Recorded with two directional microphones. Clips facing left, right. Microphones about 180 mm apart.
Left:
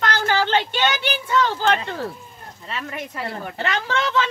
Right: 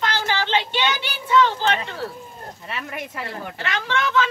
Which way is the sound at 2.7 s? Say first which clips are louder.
Left 2 dB; 10° right (ahead or behind).